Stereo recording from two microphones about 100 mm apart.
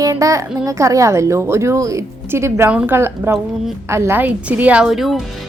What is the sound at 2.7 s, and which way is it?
Speech, 10° right (ahead or behind).